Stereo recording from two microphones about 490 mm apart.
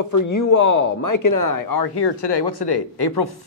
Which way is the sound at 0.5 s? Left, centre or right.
Left.